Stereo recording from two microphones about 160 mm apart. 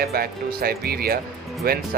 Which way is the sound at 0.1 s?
70° right (ahead or behind).